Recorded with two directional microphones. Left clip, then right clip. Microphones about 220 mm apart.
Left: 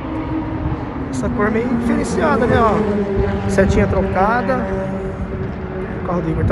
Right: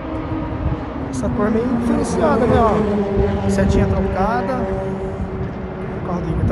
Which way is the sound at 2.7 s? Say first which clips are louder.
Even; 50° right (ahead or behind).